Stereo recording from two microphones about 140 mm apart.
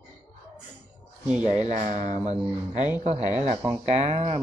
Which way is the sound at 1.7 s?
60° right (ahead or behind).